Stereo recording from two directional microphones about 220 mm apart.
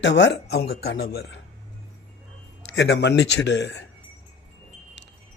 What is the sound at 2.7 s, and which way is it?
Speech, 50° left (ahead or behind).